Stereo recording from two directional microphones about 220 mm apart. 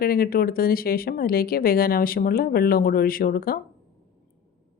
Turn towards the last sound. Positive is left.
turn(degrees=40)  # may be behind; listen again after turning